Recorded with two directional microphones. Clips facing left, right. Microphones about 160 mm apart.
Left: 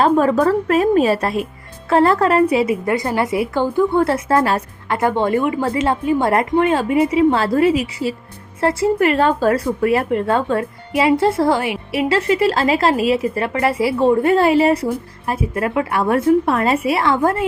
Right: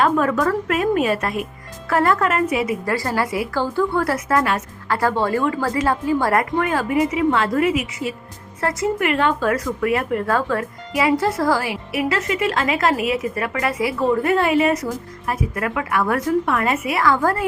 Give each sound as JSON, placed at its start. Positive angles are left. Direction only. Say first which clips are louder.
{"t": 0.0, "sound": "a woman's voice", "louder": "left 4 dB", "side_deg": 30}
{"t": 4.9, "sound": "speech", "louder": "left 2 dB", "side_deg": 20}